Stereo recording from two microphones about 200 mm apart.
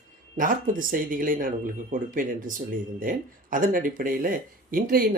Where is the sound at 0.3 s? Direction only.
40° right (ahead or behind).